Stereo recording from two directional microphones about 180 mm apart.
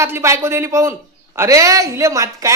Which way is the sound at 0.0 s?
15° right (ahead or behind).